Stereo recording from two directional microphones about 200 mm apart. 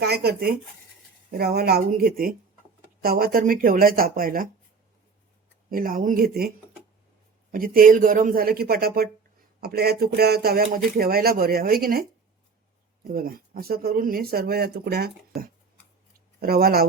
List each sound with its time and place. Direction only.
0.0 s speech: 55° right (ahead or behind)
5.7 s speech: 45° right (ahead or behind)
7.5 s speech: 45° right (ahead or behind)
13.1 s speech: 45° right (ahead or behind)
16.4 s speech: 50° right (ahead or behind)